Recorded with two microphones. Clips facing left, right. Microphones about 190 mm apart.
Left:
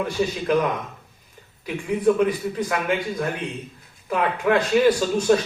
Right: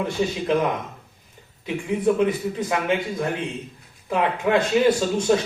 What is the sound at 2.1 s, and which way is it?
Speech, 25° right (ahead or behind).